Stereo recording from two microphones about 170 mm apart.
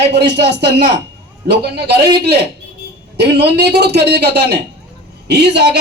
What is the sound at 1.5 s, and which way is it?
Speech, 75° right (ahead or behind).